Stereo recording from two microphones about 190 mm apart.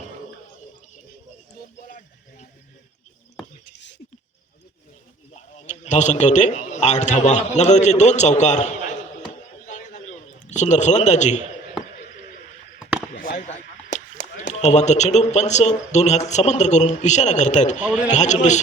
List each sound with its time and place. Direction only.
1.9 s a sound: 45° left (ahead or behind)
5.3 s a man's voice: 35° left (ahead or behind)
9.6 s a sound: 40° left (ahead or behind)
10.5 s a man's voice: 40° left (ahead or behind)
13.1 s chop: 50° left (ahead or behind)
14.4 s a man's voice: 35° left (ahead or behind)